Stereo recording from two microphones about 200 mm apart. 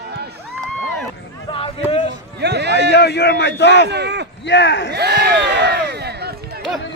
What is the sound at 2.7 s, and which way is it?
A man's voice, 55° left (ahead or behind).